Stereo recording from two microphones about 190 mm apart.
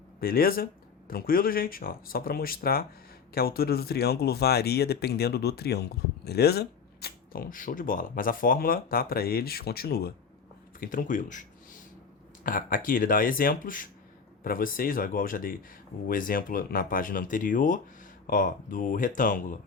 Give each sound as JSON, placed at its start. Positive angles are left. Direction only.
{"t": 0.2, "sound": "speech", "side_deg": 50}